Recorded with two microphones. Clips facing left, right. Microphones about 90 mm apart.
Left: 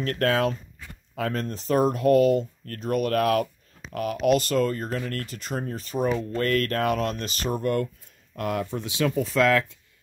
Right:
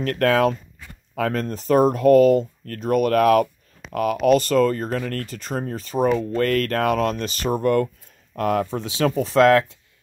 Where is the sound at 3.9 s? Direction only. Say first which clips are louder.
Right 6 dB; 60° right (ahead or behind).